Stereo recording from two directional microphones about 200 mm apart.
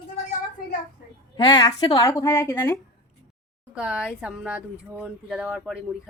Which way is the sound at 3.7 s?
5° right (ahead or behind).